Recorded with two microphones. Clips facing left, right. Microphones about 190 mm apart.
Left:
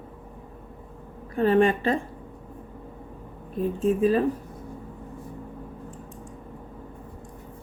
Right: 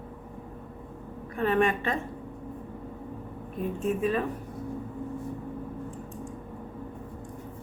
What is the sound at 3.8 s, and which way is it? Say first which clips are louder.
Speech: left 6 dB; 30° left (ahead or behind).